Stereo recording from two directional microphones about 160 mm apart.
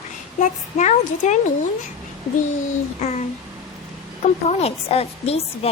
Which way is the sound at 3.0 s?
45° left (ahead or behind).